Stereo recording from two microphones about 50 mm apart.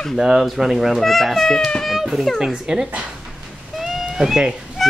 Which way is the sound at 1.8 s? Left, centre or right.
Centre.